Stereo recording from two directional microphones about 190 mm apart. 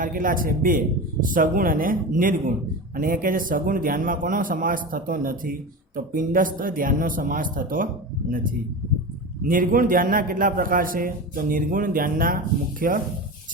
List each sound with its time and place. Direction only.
0.0 s a man's voice: 45° right (ahead or behind)
9.5 s a man's voice: 45° right (ahead or behind)